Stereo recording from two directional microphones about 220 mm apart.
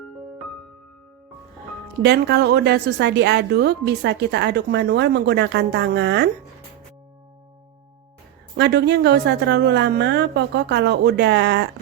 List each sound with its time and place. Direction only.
2.0 s a woman's voice: 50° right (ahead or behind)
8.5 s a woman's voice: 50° right (ahead or behind)